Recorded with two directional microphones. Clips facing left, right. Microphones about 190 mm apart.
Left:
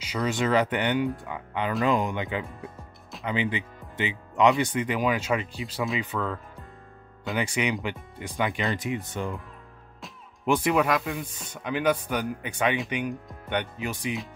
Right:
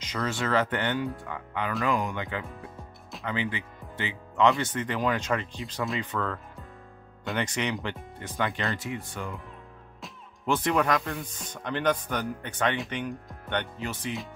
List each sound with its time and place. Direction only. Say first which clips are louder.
0.0 s speech: left 4 dB; 10° left (ahead or behind)
10.4 s speech: left 2 dB; 10° left (ahead or behind)